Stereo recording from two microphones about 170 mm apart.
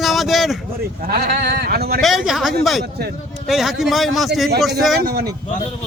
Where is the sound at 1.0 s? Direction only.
65° right (ahead or behind).